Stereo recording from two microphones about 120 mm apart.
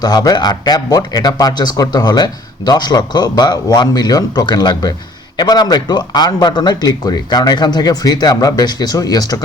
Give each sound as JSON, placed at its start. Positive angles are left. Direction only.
{"t": 0.0, "sound": "speech", "side_deg": 35}